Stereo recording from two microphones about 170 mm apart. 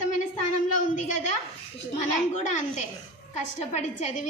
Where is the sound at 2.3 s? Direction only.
45° left (ahead or behind).